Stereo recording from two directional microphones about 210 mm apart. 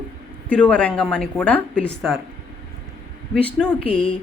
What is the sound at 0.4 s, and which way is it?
Speech, 5° left (ahead or behind).